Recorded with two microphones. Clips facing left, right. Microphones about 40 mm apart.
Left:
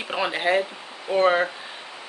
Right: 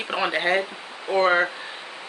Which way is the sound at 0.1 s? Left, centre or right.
Centre.